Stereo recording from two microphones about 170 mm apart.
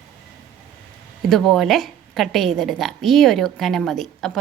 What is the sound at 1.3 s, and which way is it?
A woman's voice, centre (ahead or behind).